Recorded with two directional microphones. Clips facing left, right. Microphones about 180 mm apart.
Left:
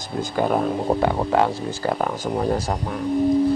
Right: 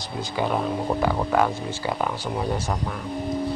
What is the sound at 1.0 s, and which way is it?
Speech, 25° left (ahead or behind).